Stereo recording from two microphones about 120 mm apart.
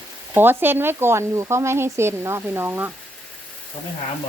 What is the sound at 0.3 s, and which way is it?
Speech, 15° right (ahead or behind).